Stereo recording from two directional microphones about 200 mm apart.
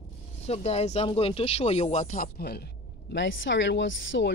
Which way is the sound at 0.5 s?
30° left (ahead or behind).